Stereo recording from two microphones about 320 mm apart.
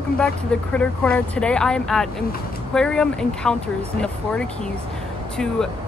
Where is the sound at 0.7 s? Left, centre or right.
Centre.